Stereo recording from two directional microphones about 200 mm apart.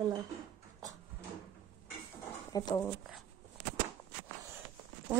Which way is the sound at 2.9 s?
Centre (ahead or behind).